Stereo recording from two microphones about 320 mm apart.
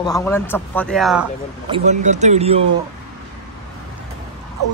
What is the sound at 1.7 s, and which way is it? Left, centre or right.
Speech, right.